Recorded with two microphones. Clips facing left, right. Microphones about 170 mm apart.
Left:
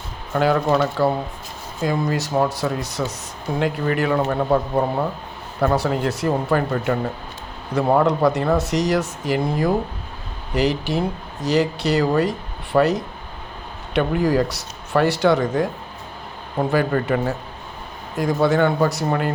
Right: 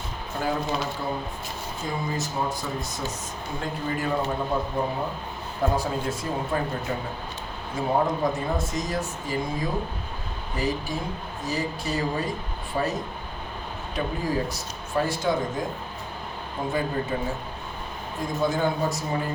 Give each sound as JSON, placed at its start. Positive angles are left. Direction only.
{"t": 0.3, "sound": "speech", "side_deg": 75}
{"t": 5.6, "sound": "speech", "side_deg": 70}